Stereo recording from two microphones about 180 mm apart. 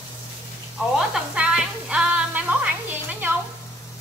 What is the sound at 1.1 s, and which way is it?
Music, 5° right (ahead or behind).